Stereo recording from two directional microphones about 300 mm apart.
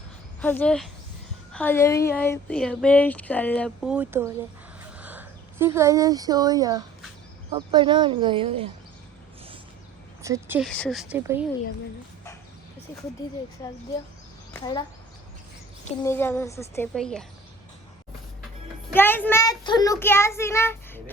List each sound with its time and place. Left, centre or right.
0.4 s speech: centre
10.2 s speech: centre
10.7 s speech: centre
13.2 s a child's voice: centre
14.5 s a child's voice: centre
16.0 s a child's voice: centre
18.9 s a child's voice: centre